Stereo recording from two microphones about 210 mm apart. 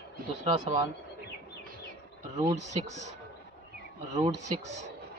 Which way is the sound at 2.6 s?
35° right (ahead or behind).